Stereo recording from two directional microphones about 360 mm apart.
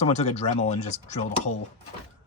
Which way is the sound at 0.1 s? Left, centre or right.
Centre.